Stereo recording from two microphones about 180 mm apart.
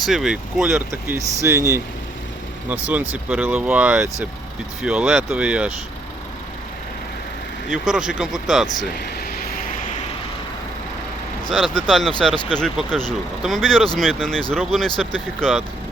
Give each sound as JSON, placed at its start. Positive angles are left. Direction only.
{"t": 0.0, "sound": "speech", "side_deg": 0}
{"t": 0.9, "sound": "speech", "side_deg": -15}
{"t": 7.7, "sound": "speech", "side_deg": -5}
{"t": 9.0, "sound": "vehicle", "side_deg": 60}
{"t": 11.5, "sound": "speech", "side_deg": 5}